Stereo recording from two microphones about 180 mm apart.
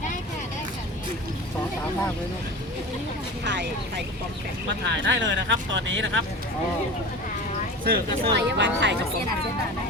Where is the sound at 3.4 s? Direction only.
75° right (ahead or behind).